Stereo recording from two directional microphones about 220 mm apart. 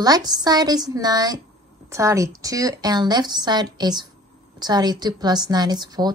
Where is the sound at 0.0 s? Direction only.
15° right (ahead or behind).